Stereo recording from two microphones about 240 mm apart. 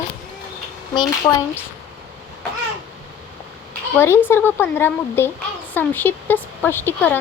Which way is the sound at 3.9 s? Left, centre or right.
Centre.